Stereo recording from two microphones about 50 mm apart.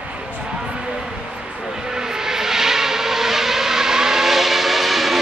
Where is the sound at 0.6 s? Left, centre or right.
Centre.